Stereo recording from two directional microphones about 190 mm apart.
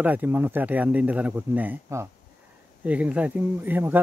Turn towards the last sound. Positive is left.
turn(degrees=-10)  # may be behind; listen again after turning